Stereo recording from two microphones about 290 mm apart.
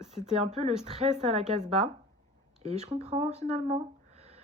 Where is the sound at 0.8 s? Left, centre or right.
Right.